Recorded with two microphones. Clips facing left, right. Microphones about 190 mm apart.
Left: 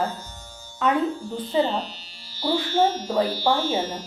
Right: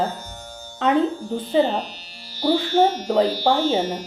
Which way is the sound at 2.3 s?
15° right (ahead or behind).